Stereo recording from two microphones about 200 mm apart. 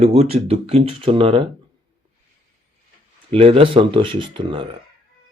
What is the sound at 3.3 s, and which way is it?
Speech, 30° right (ahead or behind).